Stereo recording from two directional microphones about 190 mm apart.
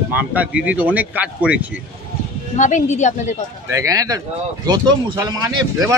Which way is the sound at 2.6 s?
40° left (ahead or behind).